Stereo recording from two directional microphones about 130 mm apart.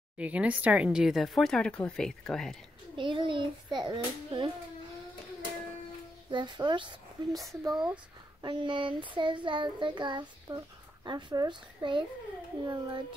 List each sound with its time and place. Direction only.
0.2 s speech: 10° right (ahead or behind)
3.0 s child singing: 40° right (ahead or behind)
6.3 s child singing: 35° right (ahead or behind)
7.7 s speech: 10° right (ahead or behind)
8.4 s child singing: 35° right (ahead or behind)
10.5 s speech: 25° right (ahead or behind)
11.1 s child singing: 35° right (ahead or behind)